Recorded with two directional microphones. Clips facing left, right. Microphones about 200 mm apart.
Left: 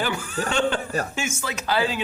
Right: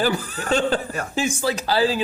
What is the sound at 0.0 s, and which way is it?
Speech, 35° right (ahead or behind).